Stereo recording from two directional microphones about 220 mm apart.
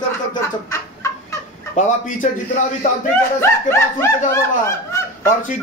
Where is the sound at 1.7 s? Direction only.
35° left (ahead or behind).